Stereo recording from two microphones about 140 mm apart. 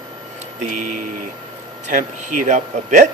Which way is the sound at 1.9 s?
65° right (ahead or behind).